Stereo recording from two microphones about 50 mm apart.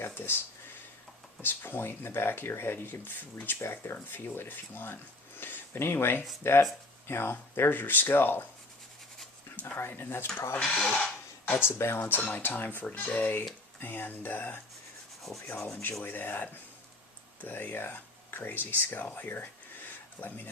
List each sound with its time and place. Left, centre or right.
0.0 s a sound: left
1.4 s speech: left
9.6 s speech: left
10.6 s speech: centre
10.9 s a sound: left
11.5 s speech: left
11.8 s speech: left
12.2 s speech: left
13.7 s speech: left
15.6 s speech: left